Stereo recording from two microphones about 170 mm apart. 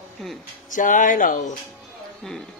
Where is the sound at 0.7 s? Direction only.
50° left (ahead or behind).